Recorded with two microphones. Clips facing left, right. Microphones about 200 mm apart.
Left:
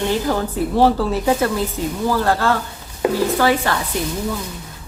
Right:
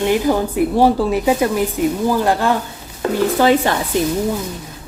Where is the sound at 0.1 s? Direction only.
15° right (ahead or behind).